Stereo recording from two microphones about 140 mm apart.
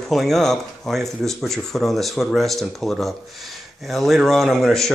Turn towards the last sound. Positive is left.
turn(degrees=0)  # may be behind; listen again after turning